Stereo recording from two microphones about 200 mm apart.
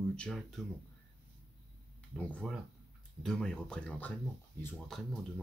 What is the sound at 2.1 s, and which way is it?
Speech, 5° left (ahead or behind).